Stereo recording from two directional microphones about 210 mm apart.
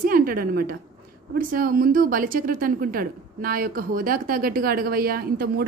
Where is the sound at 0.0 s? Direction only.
45° right (ahead or behind).